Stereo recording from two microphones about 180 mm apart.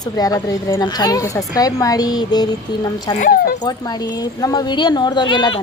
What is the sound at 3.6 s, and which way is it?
Speech, 20° left (ahead or behind).